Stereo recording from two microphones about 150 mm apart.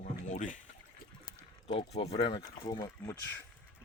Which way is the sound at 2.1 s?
30° left (ahead or behind).